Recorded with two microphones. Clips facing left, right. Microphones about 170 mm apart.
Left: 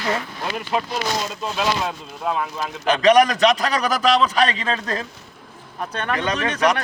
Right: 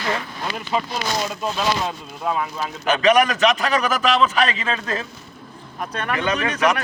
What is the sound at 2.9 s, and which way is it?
A man's voice, 35° left (ahead or behind).